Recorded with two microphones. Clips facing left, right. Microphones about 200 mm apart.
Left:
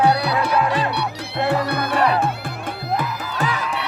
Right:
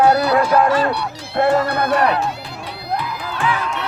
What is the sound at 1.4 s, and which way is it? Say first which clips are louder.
Speech: right 5 dB; 50° right (ahead or behind).